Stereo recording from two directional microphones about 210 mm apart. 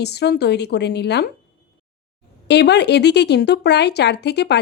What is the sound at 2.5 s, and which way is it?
Speech, 55° left (ahead or behind).